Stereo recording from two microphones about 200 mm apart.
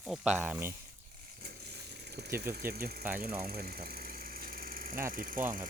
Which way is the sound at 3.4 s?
50° right (ahead or behind).